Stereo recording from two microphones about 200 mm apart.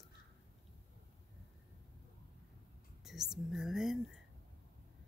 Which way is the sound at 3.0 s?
Centre (ahead or behind).